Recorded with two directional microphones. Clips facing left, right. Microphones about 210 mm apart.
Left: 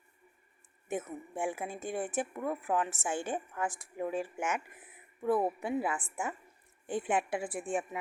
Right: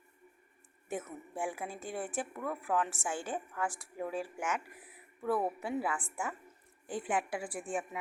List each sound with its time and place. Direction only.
0.9 s a woman's voice: 20° left (ahead or behind)